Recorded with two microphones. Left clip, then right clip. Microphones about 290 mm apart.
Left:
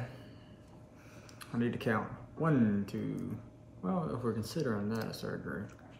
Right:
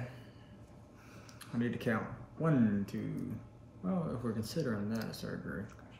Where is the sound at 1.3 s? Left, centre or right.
Centre.